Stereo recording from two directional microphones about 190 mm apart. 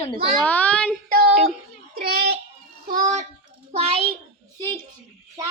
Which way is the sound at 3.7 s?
30° right (ahead or behind).